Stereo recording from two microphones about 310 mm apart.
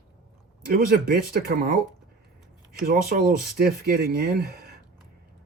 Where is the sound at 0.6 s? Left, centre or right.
Right.